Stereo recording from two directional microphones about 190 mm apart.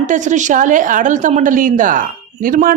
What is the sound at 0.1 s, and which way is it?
A woman's voice, 40° right (ahead or behind).